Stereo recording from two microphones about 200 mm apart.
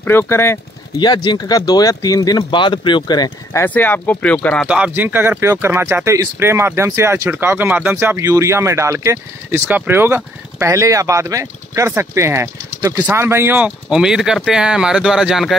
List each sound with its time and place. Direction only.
0.0 s speech: 10° left (ahead or behind)
4.6 s speech: 5° right (ahead or behind)